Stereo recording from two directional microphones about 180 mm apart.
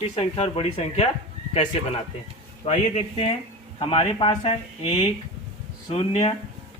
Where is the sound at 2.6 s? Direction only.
35° left (ahead or behind).